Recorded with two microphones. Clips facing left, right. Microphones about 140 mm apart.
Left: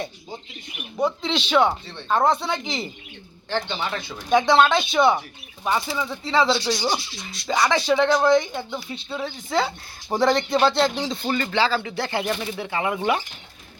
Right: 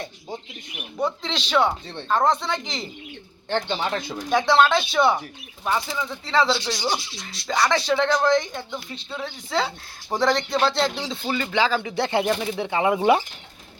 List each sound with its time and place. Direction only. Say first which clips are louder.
0.9 s speech: left 3 dB; 5° left (ahead or behind)
3.5 s speech: right 2 dB; 30° right (ahead or behind)
4.3 s speech: left 1 dB; centre (ahead or behind); by 13.2 s 20° right (ahead or behind)